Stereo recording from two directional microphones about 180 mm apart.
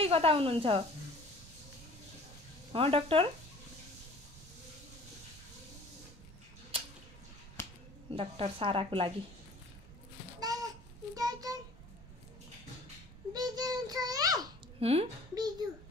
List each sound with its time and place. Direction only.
0.0 s a woman's voice: 30° right (ahead or behind)
2.7 s a woman's voice: 30° right (ahead or behind)
7.6 s finger snapping: 15° left (ahead or behind)
8.1 s a woman's voice: 30° right (ahead or behind)
10.4 s babbling: 20° right (ahead or behind)
11.1 s a sound: 20° right (ahead or behind)
13.3 s a sound: 20° right (ahead or behind)
14.8 s speech: 35° right (ahead or behind)